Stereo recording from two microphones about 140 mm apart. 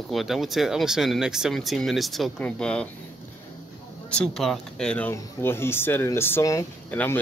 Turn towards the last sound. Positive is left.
turn(degrees=15)  # may be behind; listen again after turning